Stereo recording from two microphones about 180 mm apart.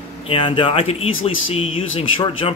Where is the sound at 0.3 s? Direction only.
30° left (ahead or behind).